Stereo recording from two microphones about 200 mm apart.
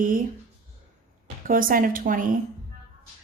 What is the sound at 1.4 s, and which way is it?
Speech, 45° right (ahead or behind).